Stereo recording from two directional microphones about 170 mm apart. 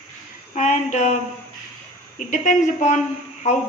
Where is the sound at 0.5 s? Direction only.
45° left (ahead or behind).